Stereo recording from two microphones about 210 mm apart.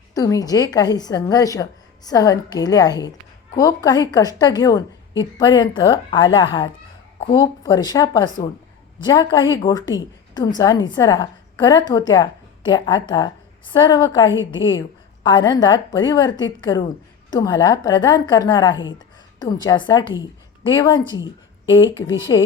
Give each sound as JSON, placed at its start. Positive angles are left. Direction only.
{"t": 0.1, "sound": "a woman's voice", "side_deg": 15}